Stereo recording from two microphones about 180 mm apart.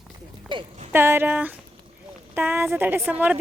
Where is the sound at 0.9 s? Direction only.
15° right (ahead or behind).